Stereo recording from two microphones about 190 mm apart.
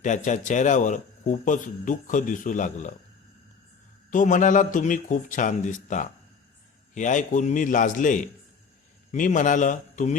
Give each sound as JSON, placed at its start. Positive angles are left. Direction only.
{"t": 0.0, "sound": "a man's voice", "side_deg": 40}
{"t": 4.1, "sound": "a man's voice", "side_deg": 40}